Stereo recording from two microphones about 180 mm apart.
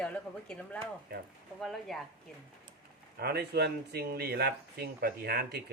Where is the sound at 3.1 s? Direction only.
60° right (ahead or behind).